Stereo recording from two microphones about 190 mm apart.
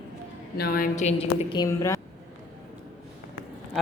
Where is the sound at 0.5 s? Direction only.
55° left (ahead or behind); by 1.5 s 35° left (ahead or behind).